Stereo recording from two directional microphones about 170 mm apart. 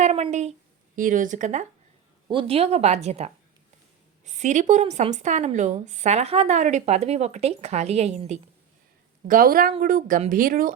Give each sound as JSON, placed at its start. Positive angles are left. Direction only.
{"t": 0.0, "sound": "a sound", "side_deg": -40}
{"t": 0.9, "sound": "a woman's voice", "side_deg": -50}
{"t": 2.3, "sound": "a woman's voice", "side_deg": -35}
{"t": 9.2, "sound": "a woman's voice", "side_deg": -55}